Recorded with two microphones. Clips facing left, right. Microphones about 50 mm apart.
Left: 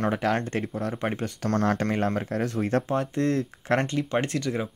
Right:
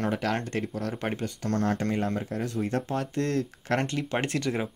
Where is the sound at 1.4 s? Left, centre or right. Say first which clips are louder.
Left 3 dB; left.